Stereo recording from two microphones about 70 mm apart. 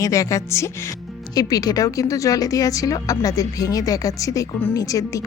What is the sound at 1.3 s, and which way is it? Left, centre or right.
A woman's voice, left.